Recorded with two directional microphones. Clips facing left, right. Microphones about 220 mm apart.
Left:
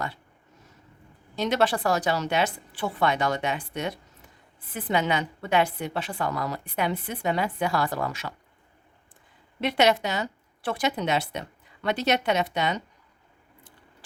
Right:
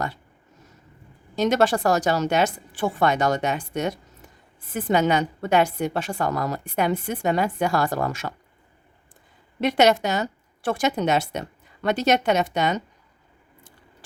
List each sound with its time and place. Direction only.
1.4 s a woman's voice: 45° right (ahead or behind)
9.6 s a woman's voice: 45° right (ahead or behind)